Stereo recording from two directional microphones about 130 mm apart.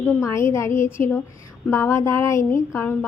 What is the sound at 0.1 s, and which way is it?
A woman's voice, 20° left (ahead or behind).